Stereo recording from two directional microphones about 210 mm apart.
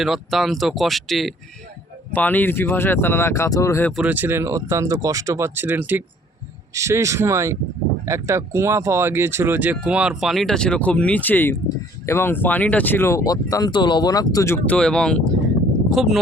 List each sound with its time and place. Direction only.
0.0 s speech: centre (ahead or behind)
3.9 s speech: 5° right (ahead or behind)